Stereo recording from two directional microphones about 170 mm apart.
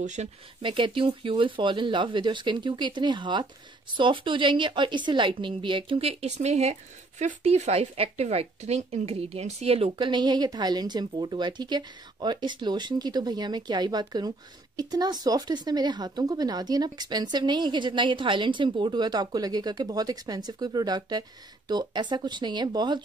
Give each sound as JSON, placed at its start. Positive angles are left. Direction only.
{"t": 0.0, "sound": "speech", "side_deg": -45}
{"t": 0.6, "sound": "speech", "side_deg": -30}